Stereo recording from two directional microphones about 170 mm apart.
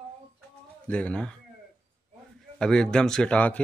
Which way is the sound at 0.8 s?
10° left (ahead or behind).